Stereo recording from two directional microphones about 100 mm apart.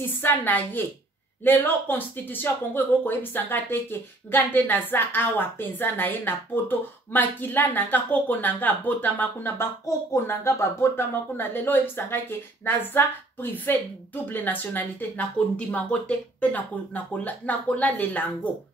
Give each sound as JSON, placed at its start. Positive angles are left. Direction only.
{"t": 0.2, "sound": "a woman's voice", "side_deg": 20}